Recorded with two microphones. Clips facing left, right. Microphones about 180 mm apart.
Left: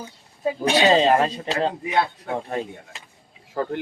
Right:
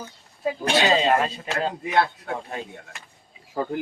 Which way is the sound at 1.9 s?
20° left (ahead or behind).